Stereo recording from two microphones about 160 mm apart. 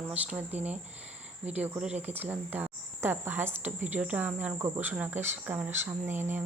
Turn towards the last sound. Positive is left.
turn(degrees=-15)  # may be behind; listen again after turning